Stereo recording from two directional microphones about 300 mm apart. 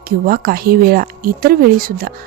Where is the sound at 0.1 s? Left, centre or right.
Right.